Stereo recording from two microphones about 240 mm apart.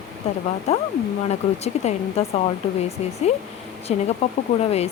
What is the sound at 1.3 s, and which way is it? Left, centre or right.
Speech, left.